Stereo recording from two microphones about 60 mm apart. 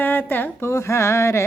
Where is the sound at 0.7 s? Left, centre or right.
Left.